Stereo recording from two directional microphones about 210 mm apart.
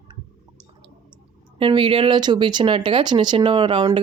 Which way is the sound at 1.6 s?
25° right (ahead or behind).